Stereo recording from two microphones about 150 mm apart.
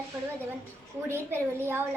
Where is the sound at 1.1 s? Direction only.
15° right (ahead or behind).